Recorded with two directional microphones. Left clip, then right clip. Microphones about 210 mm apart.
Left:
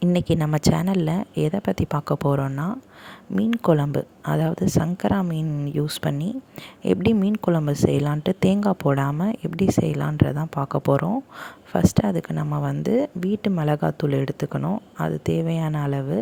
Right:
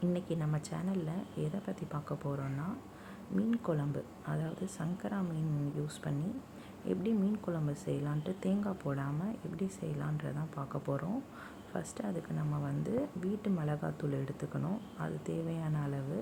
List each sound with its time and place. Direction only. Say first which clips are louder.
0.0 s speech: left 14 dB; 50° left (ahead or behind)